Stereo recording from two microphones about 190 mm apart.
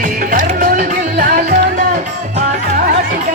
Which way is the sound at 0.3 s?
45° right (ahead or behind).